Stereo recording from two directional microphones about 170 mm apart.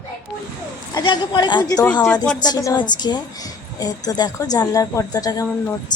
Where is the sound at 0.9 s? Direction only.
25° left (ahead or behind).